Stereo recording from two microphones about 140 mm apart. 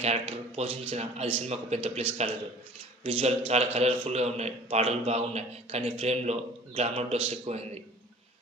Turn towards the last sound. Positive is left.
turn(degrees=-45)  # may be behind; listen again after turning